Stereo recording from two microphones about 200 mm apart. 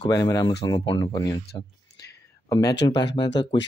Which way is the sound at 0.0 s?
20° left (ahead or behind).